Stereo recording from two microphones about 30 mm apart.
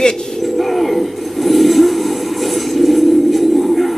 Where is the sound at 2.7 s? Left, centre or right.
Centre.